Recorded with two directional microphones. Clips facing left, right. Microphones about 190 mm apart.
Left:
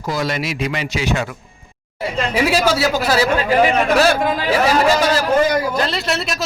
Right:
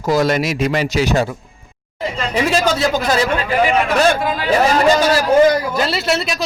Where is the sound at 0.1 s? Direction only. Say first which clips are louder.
Right 6 dB; 45° right (ahead or behind).